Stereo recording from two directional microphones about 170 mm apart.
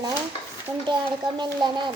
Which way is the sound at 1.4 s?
25° right (ahead or behind).